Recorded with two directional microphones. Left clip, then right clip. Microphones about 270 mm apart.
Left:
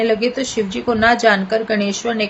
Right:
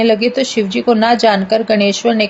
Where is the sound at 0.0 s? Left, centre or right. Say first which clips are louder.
Right 5 dB; right.